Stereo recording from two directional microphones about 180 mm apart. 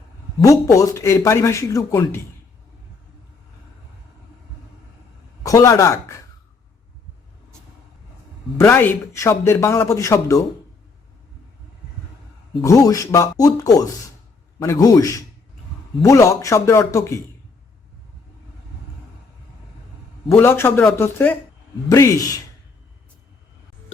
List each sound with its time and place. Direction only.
0.4 s speech: 20° left (ahead or behind)
5.4 s speech: 20° left (ahead or behind)
8.5 s speech: 10° left (ahead or behind)
12.6 s speech: 20° left (ahead or behind)
20.3 s speech: 15° left (ahead or behind)